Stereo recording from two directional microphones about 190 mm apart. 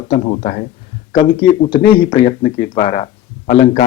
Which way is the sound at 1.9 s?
25° left (ahead or behind).